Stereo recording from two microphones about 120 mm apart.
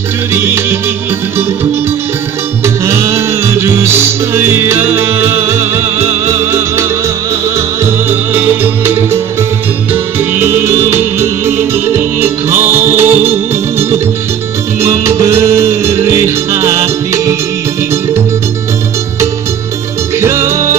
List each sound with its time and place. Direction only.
0.3 s music: 20° right (ahead or behind)
2.6 s music: 20° right (ahead or behind)
10.4 s music: 20° right (ahead or behind)
20.2 s music: 20° right (ahead or behind)